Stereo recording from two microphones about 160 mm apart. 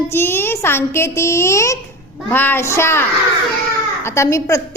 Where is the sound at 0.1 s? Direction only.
15° left (ahead or behind).